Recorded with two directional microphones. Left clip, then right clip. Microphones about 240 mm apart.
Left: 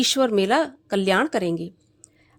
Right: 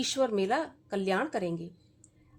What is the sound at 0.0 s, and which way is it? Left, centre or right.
A woman's voice, left.